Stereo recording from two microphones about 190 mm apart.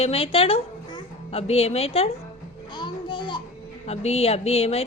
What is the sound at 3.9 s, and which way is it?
Speech, 35° left (ahead or behind).